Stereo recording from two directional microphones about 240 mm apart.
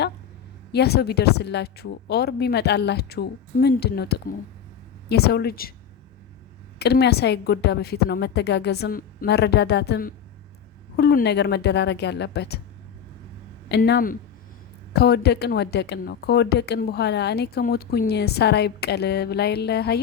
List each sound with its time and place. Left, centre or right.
0.7 s a woman's voice: left
6.7 s a woman's voice: left
13.7 s a woman's voice: left